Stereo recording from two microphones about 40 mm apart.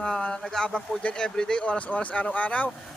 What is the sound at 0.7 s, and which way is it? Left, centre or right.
Speech, left.